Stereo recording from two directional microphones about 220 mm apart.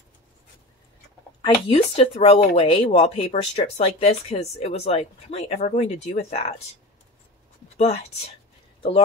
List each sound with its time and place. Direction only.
1.4 s speech: 25° left (ahead or behind)
7.7 s speech: 30° left (ahead or behind)